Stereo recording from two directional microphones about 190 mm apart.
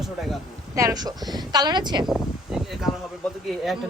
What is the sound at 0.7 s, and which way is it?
Speech, 20° right (ahead or behind).